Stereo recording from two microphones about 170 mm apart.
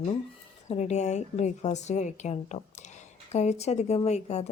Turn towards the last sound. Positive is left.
turn(degrees=40)  # may be behind; listen again after turning